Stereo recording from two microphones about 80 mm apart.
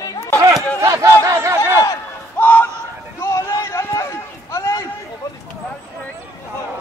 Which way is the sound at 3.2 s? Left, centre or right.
Left.